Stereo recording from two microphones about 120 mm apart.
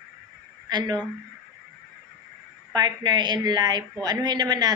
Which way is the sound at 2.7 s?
35° right (ahead or behind).